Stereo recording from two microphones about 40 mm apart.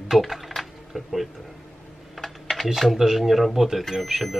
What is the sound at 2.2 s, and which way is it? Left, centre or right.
Typing, centre.